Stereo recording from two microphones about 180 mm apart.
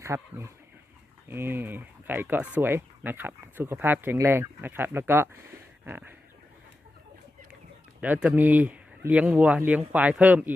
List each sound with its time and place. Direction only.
0.0 s speech: 15° right (ahead or behind)
8.0 s speech: 5° right (ahead or behind)